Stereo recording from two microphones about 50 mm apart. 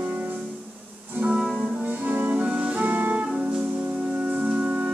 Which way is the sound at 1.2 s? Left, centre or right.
Right.